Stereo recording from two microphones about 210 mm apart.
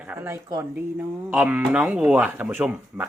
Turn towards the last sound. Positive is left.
turn(degrees=-10)  # may be behind; listen again after turning